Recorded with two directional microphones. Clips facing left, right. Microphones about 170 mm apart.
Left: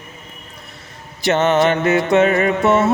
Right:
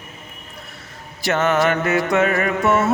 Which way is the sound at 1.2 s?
20° left (ahead or behind).